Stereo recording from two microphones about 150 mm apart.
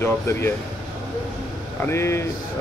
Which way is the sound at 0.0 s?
15° left (ahead or behind).